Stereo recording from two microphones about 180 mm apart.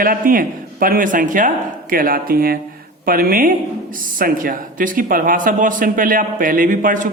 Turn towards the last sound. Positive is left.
turn(degrees=-45)  # may be behind; listen again after turning